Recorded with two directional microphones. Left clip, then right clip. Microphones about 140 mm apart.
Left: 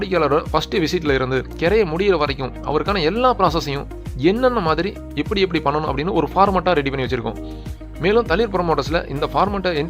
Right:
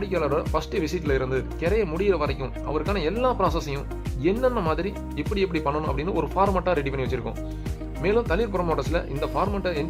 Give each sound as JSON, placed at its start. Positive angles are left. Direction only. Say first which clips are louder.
{"t": 0.0, "sound": "speech", "louder": "left 7 dB", "side_deg": 35}